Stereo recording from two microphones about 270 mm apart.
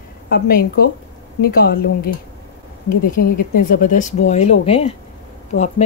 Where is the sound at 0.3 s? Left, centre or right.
Left.